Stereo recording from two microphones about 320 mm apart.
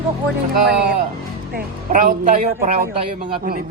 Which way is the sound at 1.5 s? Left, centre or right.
Right.